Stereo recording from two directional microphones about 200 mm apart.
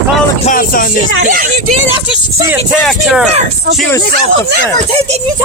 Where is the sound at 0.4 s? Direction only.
45° left (ahead or behind).